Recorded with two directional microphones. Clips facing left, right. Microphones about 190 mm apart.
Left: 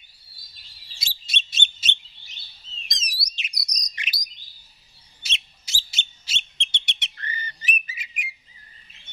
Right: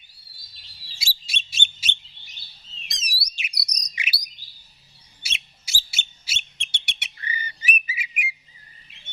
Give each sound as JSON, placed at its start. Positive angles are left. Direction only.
{"t": 0.9, "sound": "bird", "side_deg": -10}
{"t": 3.8, "sound": "chirp", "side_deg": -10}
{"t": 5.2, "sound": "a sound", "side_deg": -10}